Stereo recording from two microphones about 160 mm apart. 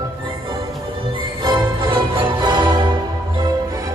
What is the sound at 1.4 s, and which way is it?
Music, 30° right (ahead or behind).